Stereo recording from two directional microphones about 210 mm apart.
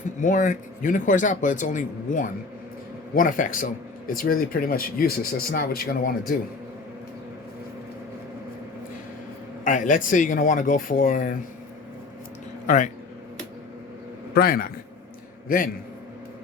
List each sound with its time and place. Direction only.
0.2 s speech: 35° left (ahead or behind)
9.6 s speech: 40° left (ahead or behind)
12.6 s speech: 35° left (ahead or behind)
14.3 s a man's voice: 45° left (ahead or behind)